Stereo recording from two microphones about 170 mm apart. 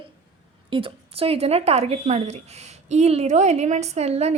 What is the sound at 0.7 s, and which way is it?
Speech, 30° right (ahead or behind).